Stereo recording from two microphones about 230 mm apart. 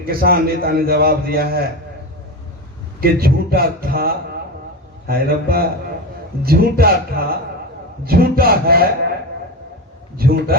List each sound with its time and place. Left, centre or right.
0.1 s a man's voice: right
3.0 s a man's voice: right
10.2 s a man's voice: right